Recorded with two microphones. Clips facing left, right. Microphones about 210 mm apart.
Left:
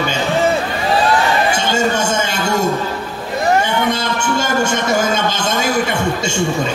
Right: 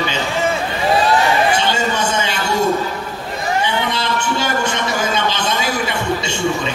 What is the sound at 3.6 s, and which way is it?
A man's voice, 45° left (ahead or behind).